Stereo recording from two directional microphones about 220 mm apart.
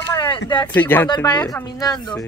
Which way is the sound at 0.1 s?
20° left (ahead or behind).